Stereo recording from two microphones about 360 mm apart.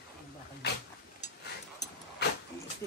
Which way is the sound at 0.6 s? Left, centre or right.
Left.